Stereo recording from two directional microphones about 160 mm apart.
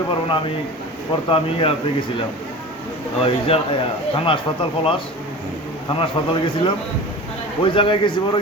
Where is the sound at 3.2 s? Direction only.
35° left (ahead or behind).